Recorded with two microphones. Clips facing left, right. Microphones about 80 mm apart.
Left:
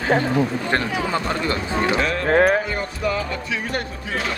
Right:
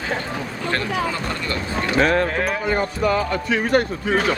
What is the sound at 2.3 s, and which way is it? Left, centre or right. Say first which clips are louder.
Speech: left 7 dB; left.